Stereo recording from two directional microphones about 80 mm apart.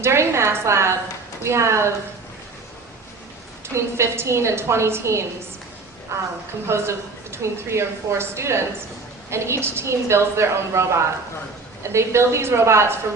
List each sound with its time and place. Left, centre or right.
0.0 s a woman's voice: right
3.8 s a woman's voice: right